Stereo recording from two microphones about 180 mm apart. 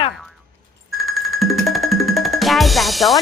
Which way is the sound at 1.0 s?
Centre (ahead or behind).